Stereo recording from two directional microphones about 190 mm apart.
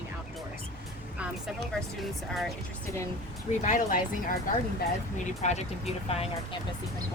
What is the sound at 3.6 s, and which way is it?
Speech, 40° left (ahead or behind).